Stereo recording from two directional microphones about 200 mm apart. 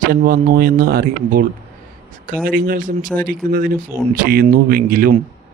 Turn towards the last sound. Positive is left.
turn(degrees=-45)  # may be behind; listen again after turning